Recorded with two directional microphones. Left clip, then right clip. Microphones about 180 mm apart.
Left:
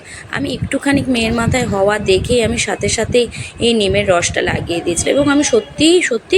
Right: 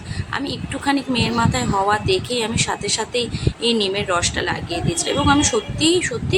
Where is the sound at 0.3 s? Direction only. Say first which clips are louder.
Left 6 dB; 15° left (ahead or behind).